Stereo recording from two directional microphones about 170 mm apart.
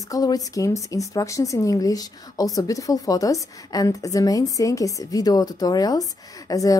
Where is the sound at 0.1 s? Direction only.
20° left (ahead or behind).